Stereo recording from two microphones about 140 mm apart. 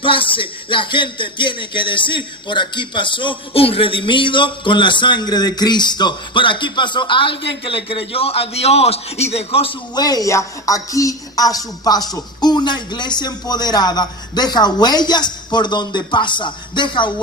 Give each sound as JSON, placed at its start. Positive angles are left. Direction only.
{"t": 0.0, "sound": "speech", "side_deg": 40}
{"t": 9.9, "sound": "a woman's voice", "side_deg": 30}